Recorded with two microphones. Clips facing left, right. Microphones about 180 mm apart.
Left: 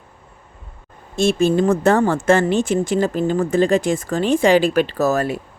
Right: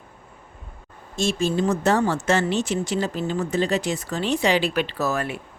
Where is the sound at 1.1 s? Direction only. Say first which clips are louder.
Left 7 dB; 60° left (ahead or behind); by 5.4 s 40° left (ahead or behind).